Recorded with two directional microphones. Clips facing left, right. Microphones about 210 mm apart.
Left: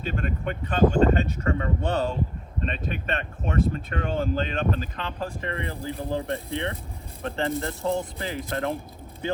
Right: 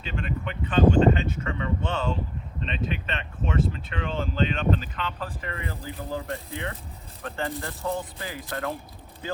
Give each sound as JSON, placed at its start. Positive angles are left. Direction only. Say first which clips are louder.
{"t": 0.0, "sound": "a sound", "louder": "left 3 dB", "side_deg": 45}
{"t": 2.6, "sound": "speech", "louder": "left 1 dB", "side_deg": 45}
{"t": 5.4, "sound": "speech", "louder": "left 4 dB", "side_deg": 30}
{"t": 7.9, "sound": "speech", "louder": "left 3 dB", "side_deg": 30}